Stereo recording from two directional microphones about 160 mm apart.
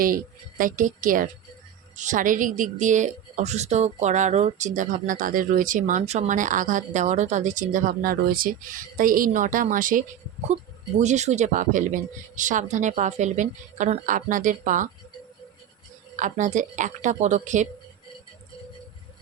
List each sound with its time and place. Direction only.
0.0 s a woman's voice: 60° right (ahead or behind)
11.0 s a woman's voice: 45° right (ahead or behind)
16.1 s a woman's voice: 50° right (ahead or behind)